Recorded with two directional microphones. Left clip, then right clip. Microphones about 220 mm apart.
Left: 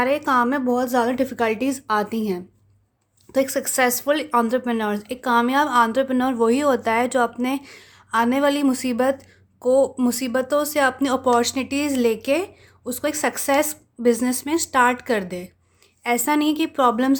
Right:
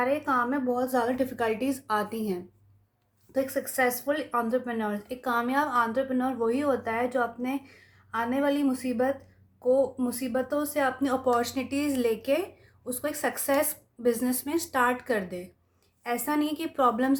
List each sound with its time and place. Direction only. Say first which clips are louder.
0.0 s speech: left 7 dB; 40° left (ahead or behind)
3.3 s speech: left 7 dB; 40° left (ahead or behind)